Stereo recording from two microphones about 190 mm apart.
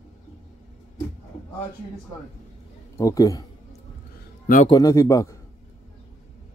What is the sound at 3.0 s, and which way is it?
Speech, 20° left (ahead or behind).